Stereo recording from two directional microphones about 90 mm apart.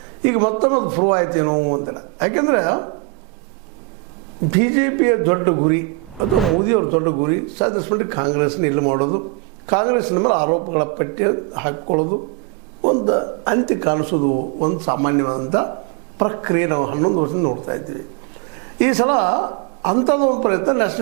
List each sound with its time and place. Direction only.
0.2 s speech: 20° right (ahead or behind)
4.4 s speech: 20° right (ahead or behind)
6.3 s speech: centre (ahead or behind)
7.0 s speech: 25° right (ahead or behind)